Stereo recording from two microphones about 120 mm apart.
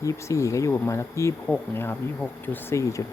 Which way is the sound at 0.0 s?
25° left (ahead or behind).